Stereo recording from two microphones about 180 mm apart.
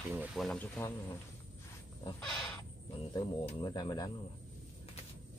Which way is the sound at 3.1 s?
25° left (ahead or behind).